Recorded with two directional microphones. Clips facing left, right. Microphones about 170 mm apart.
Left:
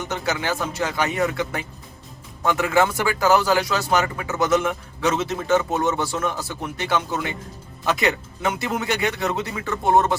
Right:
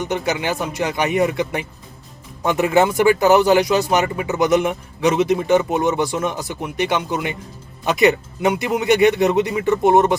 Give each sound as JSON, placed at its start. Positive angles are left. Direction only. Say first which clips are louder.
{"t": 0.0, "sound": "speech", "louder": "right 4 dB", "side_deg": -20}